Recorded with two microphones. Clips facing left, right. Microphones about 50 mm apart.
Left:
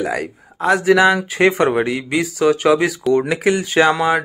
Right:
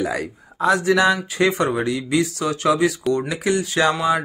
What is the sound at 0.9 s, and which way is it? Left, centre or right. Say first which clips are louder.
A man's voice: left 4 dB; left.